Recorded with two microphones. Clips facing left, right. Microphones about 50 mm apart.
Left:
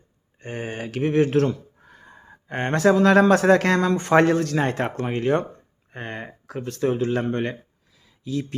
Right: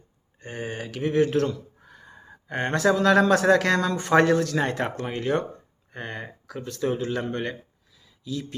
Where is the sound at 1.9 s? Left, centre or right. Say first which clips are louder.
Left 1 dB; left.